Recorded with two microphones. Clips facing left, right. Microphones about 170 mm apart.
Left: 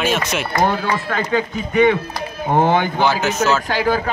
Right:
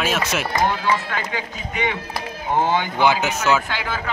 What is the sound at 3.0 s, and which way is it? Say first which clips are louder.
Speech: left 1 dB; 15° right (ahead or behind).